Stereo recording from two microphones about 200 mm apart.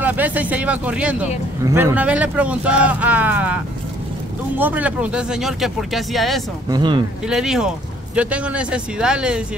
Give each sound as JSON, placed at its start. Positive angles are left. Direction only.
{"t": 0.0, "sound": "speech", "side_deg": -10}
{"t": 4.6, "sound": "a man's voice", "side_deg": -10}
{"t": 6.7, "sound": "speech", "side_deg": -25}
{"t": 7.2, "sound": "a man's voice", "side_deg": 0}